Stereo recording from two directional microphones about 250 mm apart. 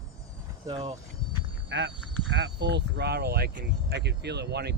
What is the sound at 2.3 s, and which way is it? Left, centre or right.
Speech, right.